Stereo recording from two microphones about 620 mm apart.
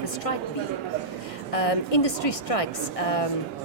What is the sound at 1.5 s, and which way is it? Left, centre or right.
A woman's voice, left.